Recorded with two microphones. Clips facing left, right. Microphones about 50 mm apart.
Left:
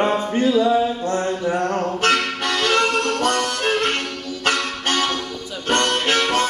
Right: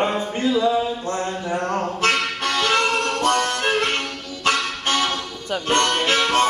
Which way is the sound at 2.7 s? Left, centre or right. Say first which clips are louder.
Left 1 dB; left.